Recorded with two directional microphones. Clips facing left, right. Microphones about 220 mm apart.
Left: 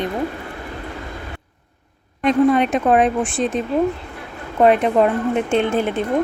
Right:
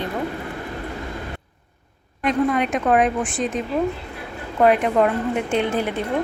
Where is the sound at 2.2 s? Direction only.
30° left (ahead or behind).